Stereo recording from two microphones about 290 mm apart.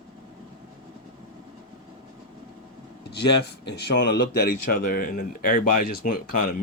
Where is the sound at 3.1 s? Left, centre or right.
Left.